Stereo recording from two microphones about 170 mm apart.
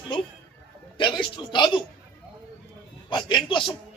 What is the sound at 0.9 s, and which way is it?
Speech, 30° left (ahead or behind).